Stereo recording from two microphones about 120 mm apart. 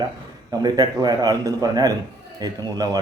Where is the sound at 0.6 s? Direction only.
35° right (ahead or behind).